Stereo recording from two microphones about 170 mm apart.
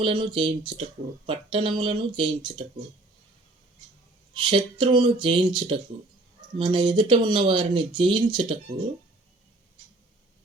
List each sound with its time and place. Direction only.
0.0 s speech: 30° right (ahead or behind)
4.4 s speech: 30° right (ahead or behind)